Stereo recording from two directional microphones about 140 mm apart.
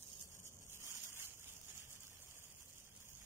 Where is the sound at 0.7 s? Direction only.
20° right (ahead or behind).